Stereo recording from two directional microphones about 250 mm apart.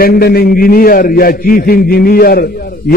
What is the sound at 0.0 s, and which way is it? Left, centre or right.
A man's voice, left.